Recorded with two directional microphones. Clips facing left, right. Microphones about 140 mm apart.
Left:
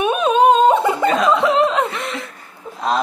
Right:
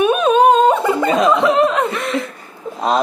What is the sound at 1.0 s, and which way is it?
Chuckle, 20° right (ahead or behind).